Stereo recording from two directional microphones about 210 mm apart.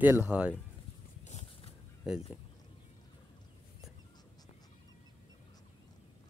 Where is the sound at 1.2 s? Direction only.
30° left (ahead or behind).